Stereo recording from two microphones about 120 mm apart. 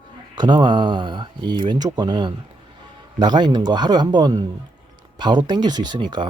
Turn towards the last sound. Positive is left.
turn(degrees=-40)  # may be behind; listen again after turning